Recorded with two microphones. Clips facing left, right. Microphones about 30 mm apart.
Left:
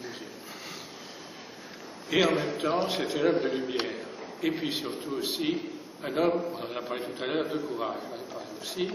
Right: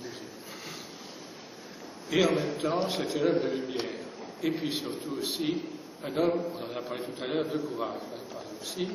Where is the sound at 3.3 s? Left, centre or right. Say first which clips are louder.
Left 1 dB; left.